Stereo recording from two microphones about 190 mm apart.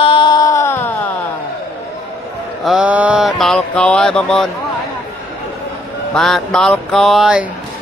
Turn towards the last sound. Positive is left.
turn(degrees=-5)  # may be behind; listen again after turning